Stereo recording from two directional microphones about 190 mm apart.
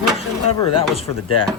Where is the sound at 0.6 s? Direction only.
30° left (ahead or behind).